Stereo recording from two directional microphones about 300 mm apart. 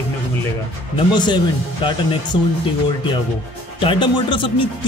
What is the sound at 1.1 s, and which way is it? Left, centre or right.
Speech, centre.